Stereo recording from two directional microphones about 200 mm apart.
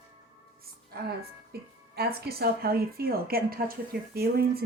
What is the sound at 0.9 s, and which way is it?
A woman's voice, 50° right (ahead or behind).